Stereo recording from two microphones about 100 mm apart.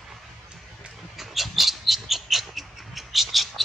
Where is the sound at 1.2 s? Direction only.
Centre (ahead or behind).